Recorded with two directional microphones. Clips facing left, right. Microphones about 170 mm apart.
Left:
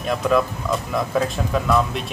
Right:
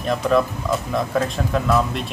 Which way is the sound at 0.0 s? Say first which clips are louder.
Right 1 dB; centre (ahead or behind).